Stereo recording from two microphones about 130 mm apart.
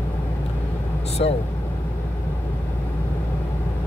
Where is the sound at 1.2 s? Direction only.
60° left (ahead or behind).